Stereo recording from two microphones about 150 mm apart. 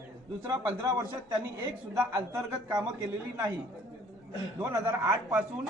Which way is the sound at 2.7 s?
20° right (ahead or behind).